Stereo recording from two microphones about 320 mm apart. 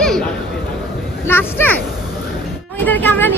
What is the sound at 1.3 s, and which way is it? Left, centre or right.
Speech, centre.